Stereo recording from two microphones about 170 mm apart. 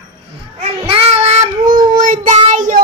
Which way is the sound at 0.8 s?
35° right (ahead or behind).